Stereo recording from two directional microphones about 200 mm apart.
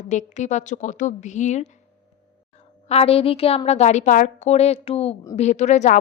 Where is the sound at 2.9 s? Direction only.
30° left (ahead or behind).